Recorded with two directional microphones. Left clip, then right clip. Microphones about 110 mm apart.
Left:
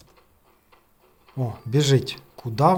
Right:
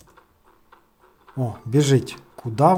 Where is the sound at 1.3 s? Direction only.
20° right (ahead or behind).